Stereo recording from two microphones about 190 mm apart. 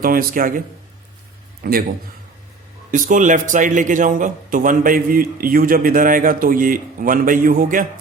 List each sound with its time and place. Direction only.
0.0 s speech: 50° right (ahead or behind)
1.6 s speech: 50° right (ahead or behind)
2.9 s speech: 45° right (ahead or behind)